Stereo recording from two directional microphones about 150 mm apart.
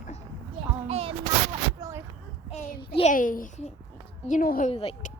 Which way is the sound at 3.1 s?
65° left (ahead or behind).